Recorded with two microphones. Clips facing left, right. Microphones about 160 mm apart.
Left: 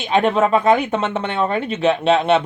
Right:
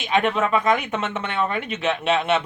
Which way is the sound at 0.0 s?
35° left (ahead or behind).